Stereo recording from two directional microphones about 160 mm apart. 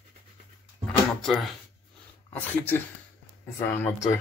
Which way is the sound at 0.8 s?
Centre (ahead or behind).